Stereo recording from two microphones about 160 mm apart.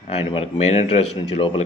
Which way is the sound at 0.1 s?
40° left (ahead or behind).